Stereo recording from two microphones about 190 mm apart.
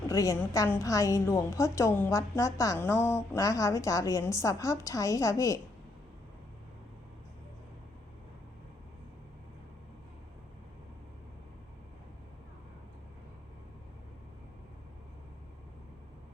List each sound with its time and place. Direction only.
0.1 s a woman's voice: 15° left (ahead or behind)